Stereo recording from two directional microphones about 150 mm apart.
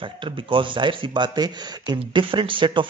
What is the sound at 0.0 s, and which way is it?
A man's voice, 35° right (ahead or behind).